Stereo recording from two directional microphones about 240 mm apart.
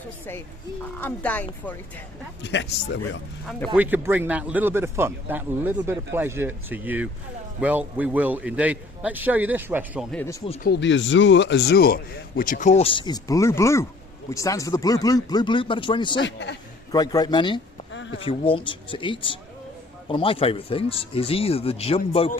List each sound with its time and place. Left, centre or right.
0.9 s speech: centre
2.4 s speech: left
3.8 s a man's voice: centre
10.6 s speech: left; by 16.2 s centre
16.2 s speech: left
16.9 s speech: centre
17.9 s a sound: left
18.2 s speech: left